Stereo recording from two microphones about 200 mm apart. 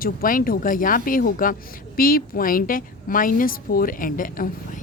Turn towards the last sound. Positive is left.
turn(degrees=45)  # may be behind; listen again after turning